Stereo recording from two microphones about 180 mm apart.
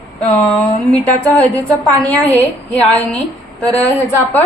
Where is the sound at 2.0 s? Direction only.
10° left (ahead or behind).